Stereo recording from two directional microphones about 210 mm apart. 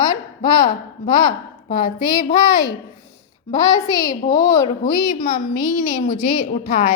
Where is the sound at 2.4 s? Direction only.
20° left (ahead or behind).